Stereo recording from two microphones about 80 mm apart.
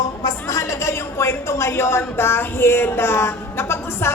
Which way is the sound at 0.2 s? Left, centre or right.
Left.